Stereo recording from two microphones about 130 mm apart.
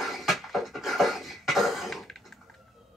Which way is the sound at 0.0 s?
Centre (ahead or behind).